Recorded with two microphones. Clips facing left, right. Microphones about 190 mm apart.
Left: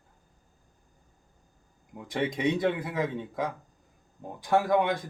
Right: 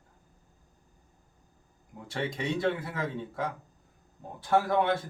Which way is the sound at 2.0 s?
15° left (ahead or behind).